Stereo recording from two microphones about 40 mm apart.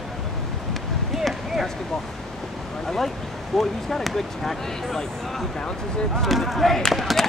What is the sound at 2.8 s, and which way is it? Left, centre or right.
Speech, centre.